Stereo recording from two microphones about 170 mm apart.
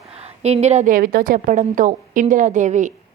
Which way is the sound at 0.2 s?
40° right (ahead or behind).